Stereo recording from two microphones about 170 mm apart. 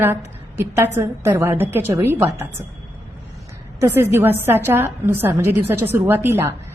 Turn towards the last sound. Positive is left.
turn(degrees=-15)  # may be behind; listen again after turning